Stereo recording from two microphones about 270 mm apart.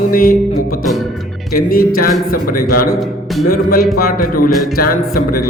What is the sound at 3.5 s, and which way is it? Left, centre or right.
Speech, left.